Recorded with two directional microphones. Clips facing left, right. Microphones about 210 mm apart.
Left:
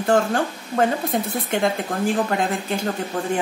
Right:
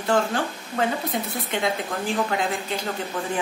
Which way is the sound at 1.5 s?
50° left (ahead or behind).